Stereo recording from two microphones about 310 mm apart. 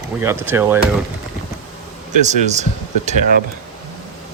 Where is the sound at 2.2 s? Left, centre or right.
Right.